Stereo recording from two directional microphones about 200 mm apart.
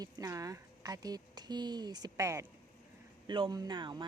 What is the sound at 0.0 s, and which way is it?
Speech, 15° right (ahead or behind).